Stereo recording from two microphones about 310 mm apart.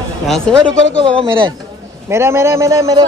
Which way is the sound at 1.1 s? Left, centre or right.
Centre.